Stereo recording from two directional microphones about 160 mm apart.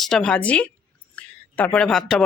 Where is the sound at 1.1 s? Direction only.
10° left (ahead or behind).